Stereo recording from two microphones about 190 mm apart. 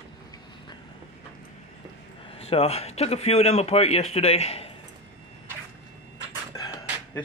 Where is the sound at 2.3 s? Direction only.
30° left (ahead or behind).